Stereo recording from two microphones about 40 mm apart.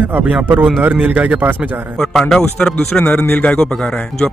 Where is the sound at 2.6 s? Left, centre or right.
Left.